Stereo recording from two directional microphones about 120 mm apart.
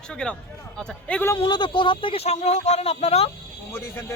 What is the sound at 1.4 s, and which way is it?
Speech, 40° left (ahead or behind).